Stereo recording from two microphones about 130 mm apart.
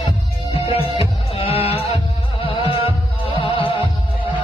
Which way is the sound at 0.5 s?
45° left (ahead or behind).